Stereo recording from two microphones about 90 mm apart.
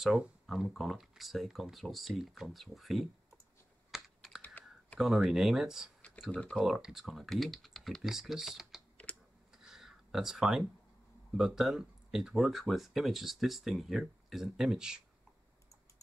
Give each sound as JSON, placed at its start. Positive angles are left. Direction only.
{"t": 0.0, "sound": "speech", "side_deg": -5}
{"t": 3.9, "sound": "computer keyboard", "side_deg": -5}
{"t": 4.4, "sound": "computer keyboard", "side_deg": 15}
{"t": 5.0, "sound": "speech", "side_deg": -5}
{"t": 6.3, "sound": "speech", "side_deg": 10}
{"t": 6.6, "sound": "speech", "side_deg": -5}
{"t": 9.5, "sound": "a sound", "side_deg": -5}
{"t": 11.3, "sound": "speech", "side_deg": -5}